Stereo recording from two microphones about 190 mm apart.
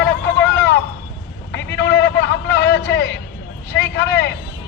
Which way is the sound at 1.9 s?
65° left (ahead or behind).